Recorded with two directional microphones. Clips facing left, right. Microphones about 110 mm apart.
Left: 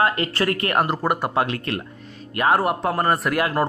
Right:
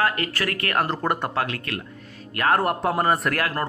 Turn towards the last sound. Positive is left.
turn(degrees=0)  # may be behind; listen again after turning